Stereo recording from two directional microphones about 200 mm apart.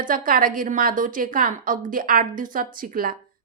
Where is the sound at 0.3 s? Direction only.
45° right (ahead or behind).